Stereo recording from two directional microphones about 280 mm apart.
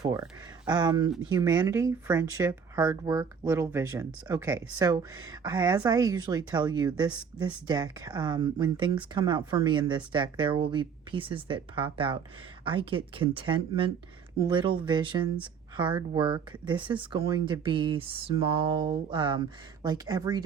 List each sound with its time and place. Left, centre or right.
0.0 s speech: centre